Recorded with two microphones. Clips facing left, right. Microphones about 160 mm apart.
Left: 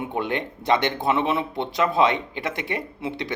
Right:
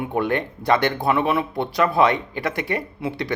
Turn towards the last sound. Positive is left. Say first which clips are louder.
# right 3 dB
turn(degrees=20)  # may be behind; listen again after turning